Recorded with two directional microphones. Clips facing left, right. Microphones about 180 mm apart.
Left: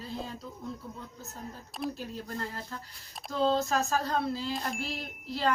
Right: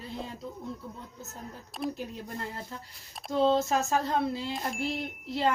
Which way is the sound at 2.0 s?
20° right (ahead or behind).